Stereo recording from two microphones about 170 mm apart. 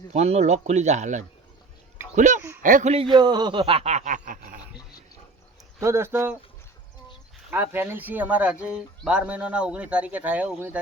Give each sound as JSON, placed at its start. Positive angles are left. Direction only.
{"t": 0.1, "sound": "a man's voice", "side_deg": -40}
{"t": 5.8, "sound": "speech", "side_deg": -15}
{"t": 7.5, "sound": "speech", "side_deg": -10}